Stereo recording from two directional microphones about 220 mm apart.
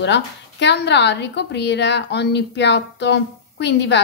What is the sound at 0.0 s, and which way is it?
A woman's voice, 50° left (ahead or behind).